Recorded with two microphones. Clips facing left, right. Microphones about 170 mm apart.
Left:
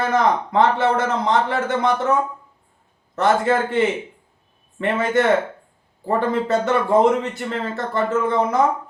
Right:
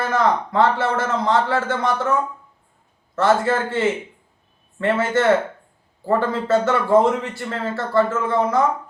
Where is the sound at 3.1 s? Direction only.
20° left (ahead or behind).